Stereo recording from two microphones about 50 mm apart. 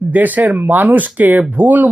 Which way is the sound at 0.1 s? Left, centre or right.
Right.